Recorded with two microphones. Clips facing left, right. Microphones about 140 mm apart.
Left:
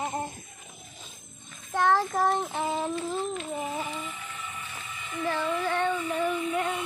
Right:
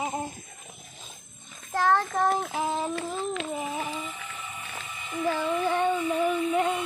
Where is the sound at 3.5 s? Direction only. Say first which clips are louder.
Right 1 dB; centre (ahead or behind).